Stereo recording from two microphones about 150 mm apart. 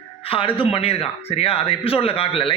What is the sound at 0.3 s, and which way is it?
A man's voice, 35° left (ahead or behind).